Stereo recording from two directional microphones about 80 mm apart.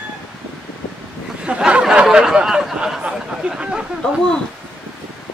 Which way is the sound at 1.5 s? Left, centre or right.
Centre.